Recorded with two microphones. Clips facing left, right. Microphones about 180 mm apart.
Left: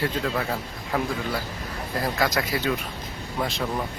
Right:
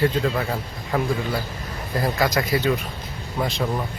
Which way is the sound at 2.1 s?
Centre (ahead or behind).